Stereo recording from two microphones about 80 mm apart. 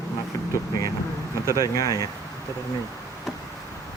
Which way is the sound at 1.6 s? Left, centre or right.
Left.